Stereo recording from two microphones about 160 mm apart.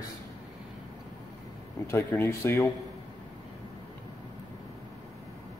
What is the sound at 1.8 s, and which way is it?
Speech, 15° left (ahead or behind).